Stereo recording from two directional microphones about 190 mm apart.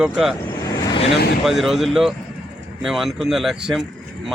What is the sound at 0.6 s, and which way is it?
Vehicle, 20° left (ahead or behind).